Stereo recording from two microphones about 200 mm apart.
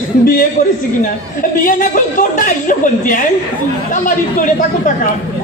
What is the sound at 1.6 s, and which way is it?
A woman's voice, 40° left (ahead or behind).